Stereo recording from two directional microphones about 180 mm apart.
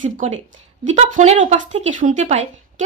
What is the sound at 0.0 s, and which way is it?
A woman's voice, 45° right (ahead or behind).